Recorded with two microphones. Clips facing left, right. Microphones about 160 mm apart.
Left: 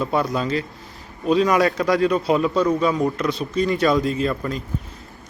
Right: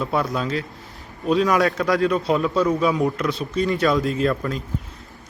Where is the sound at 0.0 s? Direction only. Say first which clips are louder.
Left 1 dB; centre (ahead or behind).